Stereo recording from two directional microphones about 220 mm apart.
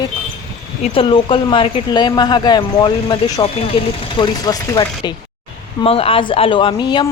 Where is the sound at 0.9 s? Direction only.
25° left (ahead or behind).